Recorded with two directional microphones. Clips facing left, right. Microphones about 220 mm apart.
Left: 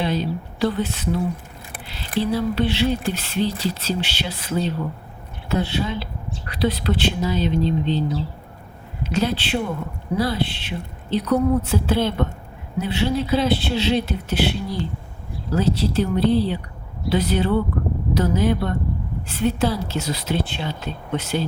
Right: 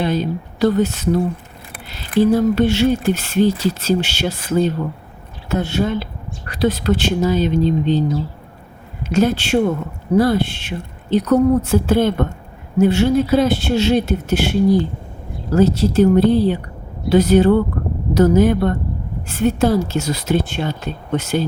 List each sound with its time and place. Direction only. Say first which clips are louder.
0.0 s speech: right 4 dB; 45° right (ahead or behind)